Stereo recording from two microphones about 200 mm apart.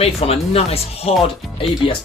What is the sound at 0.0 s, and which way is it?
Speech, 30° left (ahead or behind).